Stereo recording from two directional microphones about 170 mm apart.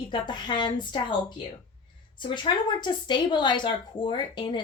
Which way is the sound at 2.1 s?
25° left (ahead or behind).